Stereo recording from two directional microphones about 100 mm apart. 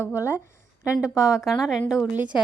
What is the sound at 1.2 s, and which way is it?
A woman's voice, 5° right (ahead or behind).